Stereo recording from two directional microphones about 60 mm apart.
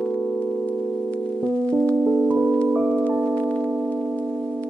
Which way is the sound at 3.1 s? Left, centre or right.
Centre.